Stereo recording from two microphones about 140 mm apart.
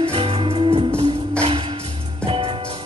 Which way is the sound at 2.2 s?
45° right (ahead or behind).